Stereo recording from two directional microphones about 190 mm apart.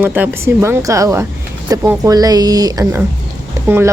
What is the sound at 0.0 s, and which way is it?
A woman's voice, 10° right (ahead or behind).